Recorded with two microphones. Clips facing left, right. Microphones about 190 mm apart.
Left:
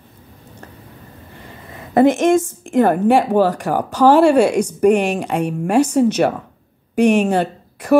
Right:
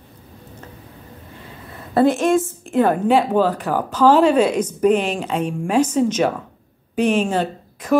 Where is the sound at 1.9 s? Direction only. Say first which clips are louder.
Left 3 dB; 15° left (ahead or behind).